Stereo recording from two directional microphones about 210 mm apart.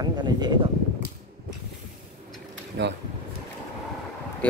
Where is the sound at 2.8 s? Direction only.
60° right (ahead or behind).